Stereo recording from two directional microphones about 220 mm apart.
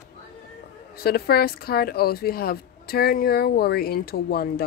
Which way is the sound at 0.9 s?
45° left (ahead or behind).